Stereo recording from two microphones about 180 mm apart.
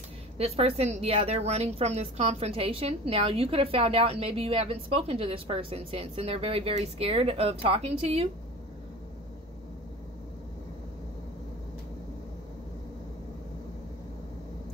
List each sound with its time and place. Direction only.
0.4 s a woman's voice: 35° right (ahead or behind)